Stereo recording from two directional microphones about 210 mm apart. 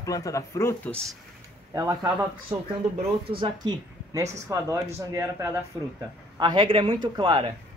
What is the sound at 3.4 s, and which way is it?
A man's voice, 20° right (ahead or behind).